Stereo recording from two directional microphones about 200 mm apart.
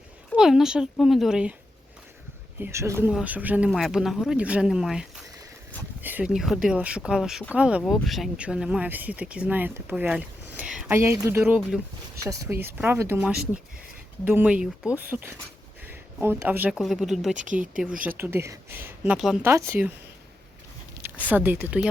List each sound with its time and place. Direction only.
0.3 s speech: centre (ahead or behind)
2.6 s speech: 10° right (ahead or behind)
17.3 s speech: 40° right (ahead or behind)
18.2 s speech: 10° right (ahead or behind)
21.2 s speech: 10° right (ahead or behind)